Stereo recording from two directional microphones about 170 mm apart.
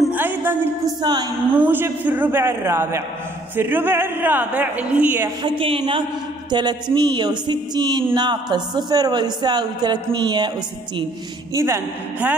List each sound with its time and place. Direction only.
0.0 s music: 10° right (ahead or behind)
1.0 s speech: 25° right (ahead or behind)
1.5 s speech: 10° right (ahead or behind)
5.4 s a woman's voice: 35° right (ahead or behind)
11.5 s speech: 15° right (ahead or behind)